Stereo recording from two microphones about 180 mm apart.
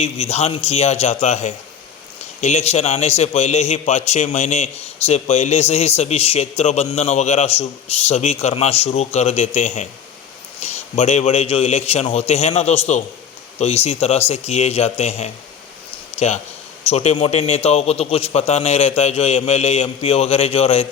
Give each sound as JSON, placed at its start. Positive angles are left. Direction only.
{"t": 0.0, "sound": "a man's voice", "side_deg": 35}